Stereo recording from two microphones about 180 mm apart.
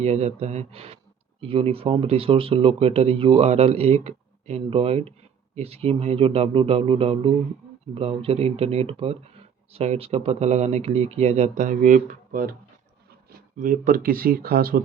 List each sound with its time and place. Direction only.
0.0 s speech: 35° right (ahead or behind); by 12.5 s 50° right (ahead or behind)
13.6 s speech: 50° right (ahead or behind)